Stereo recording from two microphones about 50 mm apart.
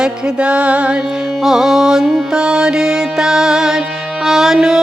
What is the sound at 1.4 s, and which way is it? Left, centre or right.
Music, centre.